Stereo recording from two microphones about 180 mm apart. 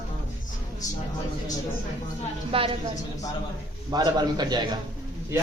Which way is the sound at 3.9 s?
25° right (ahead or behind).